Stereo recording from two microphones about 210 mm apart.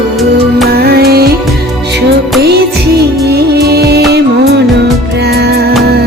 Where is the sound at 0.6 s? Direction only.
50° right (ahead or behind).